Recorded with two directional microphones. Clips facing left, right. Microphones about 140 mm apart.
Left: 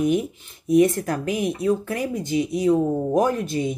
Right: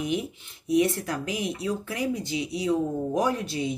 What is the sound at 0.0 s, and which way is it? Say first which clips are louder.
Speech: left 7 dB; 45° left (ahead or behind).